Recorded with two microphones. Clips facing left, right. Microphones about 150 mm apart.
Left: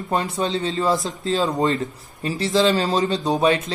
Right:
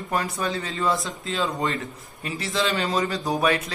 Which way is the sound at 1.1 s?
40° left (ahead or behind).